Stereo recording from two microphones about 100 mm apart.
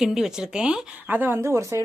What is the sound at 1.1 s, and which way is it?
Speech, 20° right (ahead or behind).